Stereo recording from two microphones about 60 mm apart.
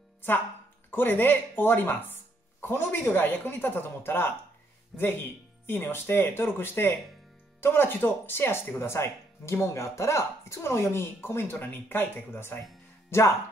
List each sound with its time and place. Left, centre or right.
0.9 s speech: left
5.7 s speech: left
11.5 s speech: left